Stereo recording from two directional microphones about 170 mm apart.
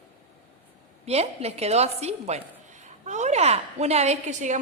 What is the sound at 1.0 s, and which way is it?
A woman's voice, 40° right (ahead or behind).